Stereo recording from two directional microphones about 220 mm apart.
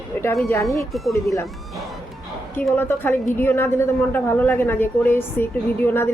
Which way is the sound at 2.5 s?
10° left (ahead or behind).